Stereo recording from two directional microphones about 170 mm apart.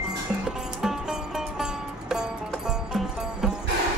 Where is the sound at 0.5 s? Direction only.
5° right (ahead or behind).